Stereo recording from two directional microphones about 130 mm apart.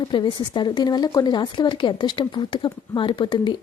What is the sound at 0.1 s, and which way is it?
Speech, 40° left (ahead or behind).